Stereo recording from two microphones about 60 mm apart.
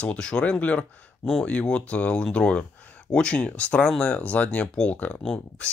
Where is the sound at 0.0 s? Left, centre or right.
Centre.